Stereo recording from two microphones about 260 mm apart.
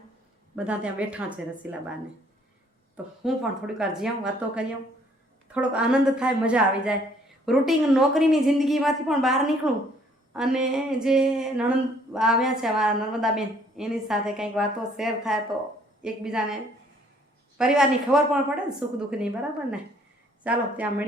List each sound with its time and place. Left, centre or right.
0.5 s speech: centre
3.2 s speech: centre
17.6 s speech: centre